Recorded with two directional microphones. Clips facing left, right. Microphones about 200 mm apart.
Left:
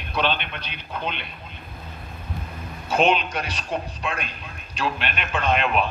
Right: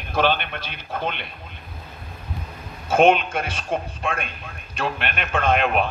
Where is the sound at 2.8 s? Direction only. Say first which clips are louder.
Right 4 dB; 50° right (ahead or behind).